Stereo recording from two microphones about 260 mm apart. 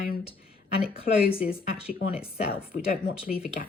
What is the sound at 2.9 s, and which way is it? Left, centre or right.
Speech, left.